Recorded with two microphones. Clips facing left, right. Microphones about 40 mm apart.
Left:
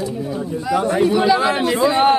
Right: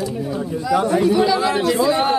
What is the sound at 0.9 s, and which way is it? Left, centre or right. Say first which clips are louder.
A man's voice: left 3 dB; centre.